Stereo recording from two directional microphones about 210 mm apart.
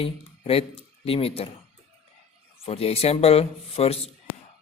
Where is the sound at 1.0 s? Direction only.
25° left (ahead or behind).